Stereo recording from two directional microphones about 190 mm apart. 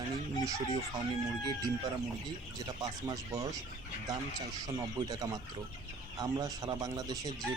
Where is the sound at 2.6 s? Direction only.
20° right (ahead or behind).